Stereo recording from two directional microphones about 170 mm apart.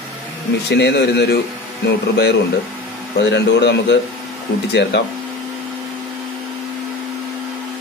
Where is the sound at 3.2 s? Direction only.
90° left.